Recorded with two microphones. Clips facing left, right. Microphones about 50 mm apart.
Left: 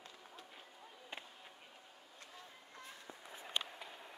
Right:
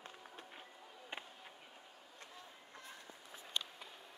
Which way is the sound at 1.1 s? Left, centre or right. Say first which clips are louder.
Right 2 dB; right.